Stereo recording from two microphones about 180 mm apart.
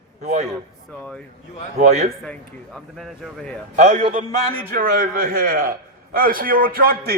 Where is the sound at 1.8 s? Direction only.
40° right (ahead or behind).